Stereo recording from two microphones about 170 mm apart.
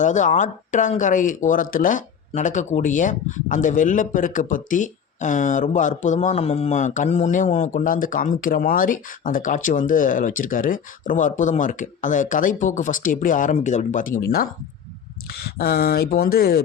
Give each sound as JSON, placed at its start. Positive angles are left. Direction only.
{"t": 0.0, "sound": "speech", "side_deg": 45}
{"t": 15.5, "sound": "speech", "side_deg": 65}